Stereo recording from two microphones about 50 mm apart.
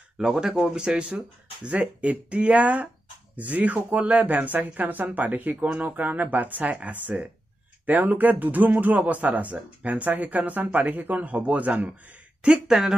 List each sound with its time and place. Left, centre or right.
0.2 s a man's voice: centre
12.4 s speech: centre